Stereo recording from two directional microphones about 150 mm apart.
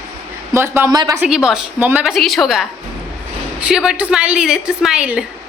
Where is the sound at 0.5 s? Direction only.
15° right (ahead or behind).